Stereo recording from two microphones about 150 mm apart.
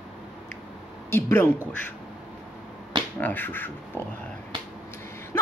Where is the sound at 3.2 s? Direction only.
15° left (ahead or behind).